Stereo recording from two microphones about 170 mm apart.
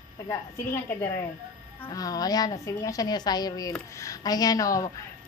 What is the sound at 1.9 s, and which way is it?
A woman's voice, 20° left (ahead or behind).